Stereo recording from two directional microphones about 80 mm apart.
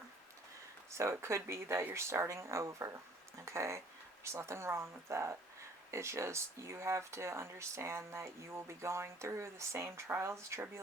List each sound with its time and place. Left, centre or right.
1.2 s speech: right